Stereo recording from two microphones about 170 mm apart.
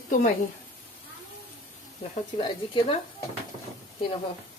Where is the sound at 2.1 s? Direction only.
30° left (ahead or behind).